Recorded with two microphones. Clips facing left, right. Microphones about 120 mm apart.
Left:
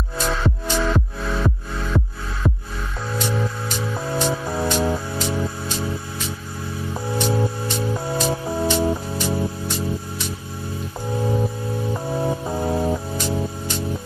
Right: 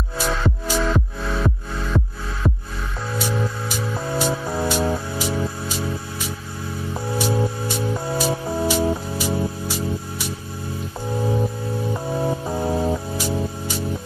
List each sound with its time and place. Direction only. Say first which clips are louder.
0.2 s music: even; 5° right (ahead or behind)
6.9 s music: even; 5° right (ahead or behind)
11.9 s music: even; centre (ahead or behind)